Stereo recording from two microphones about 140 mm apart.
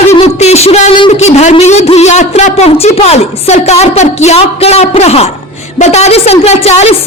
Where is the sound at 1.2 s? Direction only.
50° left (ahead or behind).